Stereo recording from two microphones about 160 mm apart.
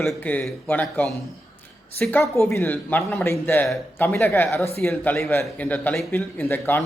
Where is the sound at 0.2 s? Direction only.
10° left (ahead or behind).